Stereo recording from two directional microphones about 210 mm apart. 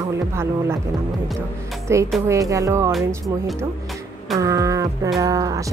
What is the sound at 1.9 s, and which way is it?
Speech, 15° right (ahead or behind).